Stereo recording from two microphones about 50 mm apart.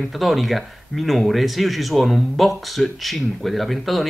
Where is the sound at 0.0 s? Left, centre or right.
Centre.